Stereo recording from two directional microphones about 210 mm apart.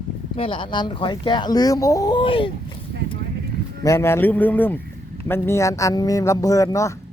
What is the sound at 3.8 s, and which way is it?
Speech, 10° left (ahead or behind).